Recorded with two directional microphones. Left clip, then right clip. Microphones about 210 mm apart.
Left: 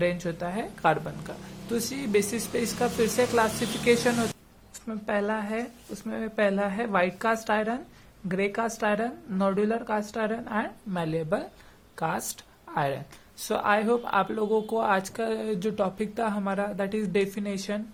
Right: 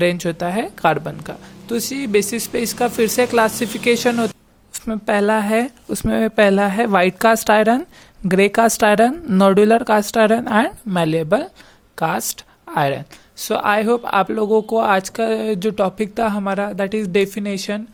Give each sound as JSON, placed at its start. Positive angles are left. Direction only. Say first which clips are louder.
{"t": 0.0, "sound": "speech", "louder": "right 9 dB", "side_deg": -45}
{"t": 4.7, "sound": "speech", "louder": "right 10 dB", "side_deg": -45}